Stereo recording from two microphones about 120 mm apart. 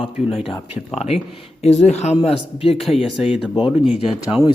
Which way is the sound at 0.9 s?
65° left (ahead or behind).